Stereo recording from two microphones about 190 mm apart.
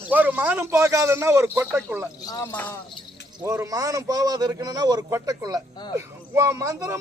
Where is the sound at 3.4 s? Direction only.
15° right (ahead or behind).